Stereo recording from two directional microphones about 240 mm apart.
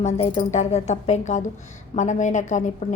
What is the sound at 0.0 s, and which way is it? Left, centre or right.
A woman's voice, left.